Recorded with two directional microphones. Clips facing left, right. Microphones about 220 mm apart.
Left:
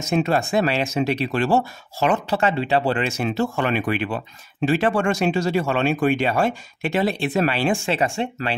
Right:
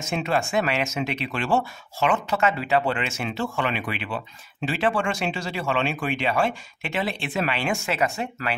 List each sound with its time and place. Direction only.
0.0 s speech: 40° left (ahead or behind)